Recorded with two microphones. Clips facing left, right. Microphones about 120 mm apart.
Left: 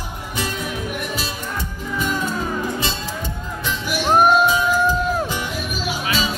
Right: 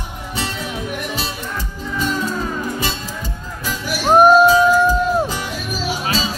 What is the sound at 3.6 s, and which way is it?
Music, 40° right (ahead or behind).